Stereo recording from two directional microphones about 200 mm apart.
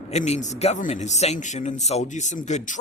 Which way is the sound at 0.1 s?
35° left (ahead or behind).